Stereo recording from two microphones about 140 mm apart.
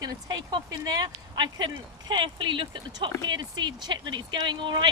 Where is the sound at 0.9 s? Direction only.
30° right (ahead or behind).